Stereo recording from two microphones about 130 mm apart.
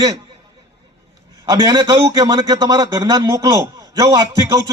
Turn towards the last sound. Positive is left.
turn(degrees=-25)  # may be behind; listen again after turning